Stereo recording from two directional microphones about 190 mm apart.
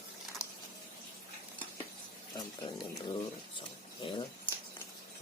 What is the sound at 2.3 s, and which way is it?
Speech, 20° left (ahead or behind).